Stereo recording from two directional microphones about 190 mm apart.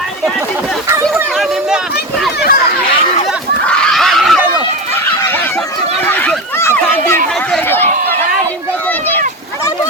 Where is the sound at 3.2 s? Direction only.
5° left (ahead or behind).